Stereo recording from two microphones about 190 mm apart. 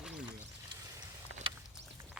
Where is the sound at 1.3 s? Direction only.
75° left (ahead or behind).